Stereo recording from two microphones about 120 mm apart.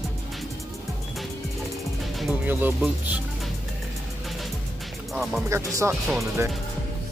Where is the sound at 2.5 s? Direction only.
15° right (ahead or behind).